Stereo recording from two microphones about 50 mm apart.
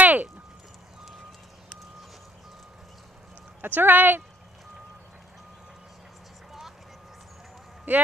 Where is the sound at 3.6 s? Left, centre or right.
Right.